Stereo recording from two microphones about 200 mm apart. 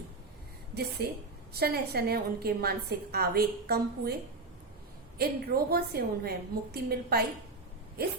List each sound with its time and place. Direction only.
1.5 s a woman's voice: 50° right (ahead or behind)